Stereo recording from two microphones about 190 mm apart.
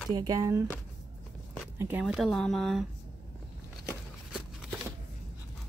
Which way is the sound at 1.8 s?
10° right (ahead or behind).